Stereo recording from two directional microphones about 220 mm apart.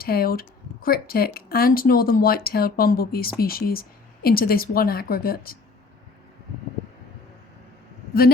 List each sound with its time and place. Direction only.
0.0 s speech: 45° left (ahead or behind)